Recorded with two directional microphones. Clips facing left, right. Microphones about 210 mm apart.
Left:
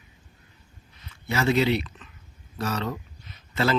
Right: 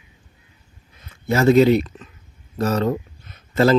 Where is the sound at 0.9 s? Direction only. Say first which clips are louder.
Right 8 dB; 50° right (ahead or behind).